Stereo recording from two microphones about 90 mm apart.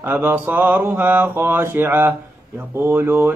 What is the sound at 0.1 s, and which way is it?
Mantra, 20° right (ahead or behind).